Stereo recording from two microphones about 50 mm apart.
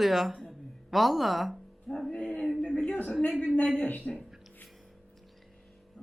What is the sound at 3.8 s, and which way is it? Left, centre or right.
Speech, left.